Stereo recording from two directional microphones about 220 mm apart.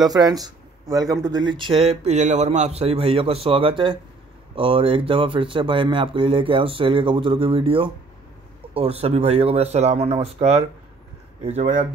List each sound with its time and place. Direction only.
0.0 s speech: 15° right (ahead or behind); by 11.8 s 35° right (ahead or behind)